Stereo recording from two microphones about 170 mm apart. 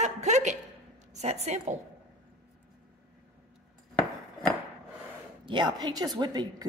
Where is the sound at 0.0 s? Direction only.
45° right (ahead or behind).